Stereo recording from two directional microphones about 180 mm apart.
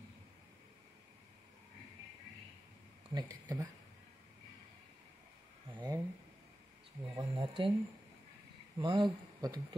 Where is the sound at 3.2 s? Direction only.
20° right (ahead or behind).